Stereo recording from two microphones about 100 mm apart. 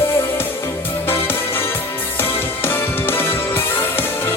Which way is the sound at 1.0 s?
20° left (ahead or behind).